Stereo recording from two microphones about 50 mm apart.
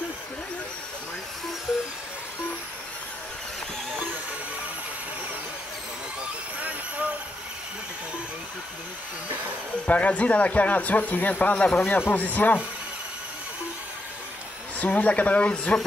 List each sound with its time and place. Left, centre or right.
9.8 s speech: left
11.6 s speech: left
12.1 s speech: left
14.8 s speech: left